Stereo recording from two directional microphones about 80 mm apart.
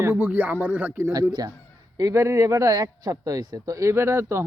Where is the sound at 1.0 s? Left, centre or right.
Right.